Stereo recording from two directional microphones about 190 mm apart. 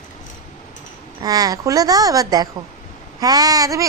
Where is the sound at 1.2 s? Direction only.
20° right (ahead or behind).